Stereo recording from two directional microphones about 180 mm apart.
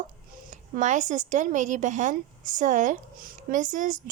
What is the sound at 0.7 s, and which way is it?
A woman's voice, 40° right (ahead or behind).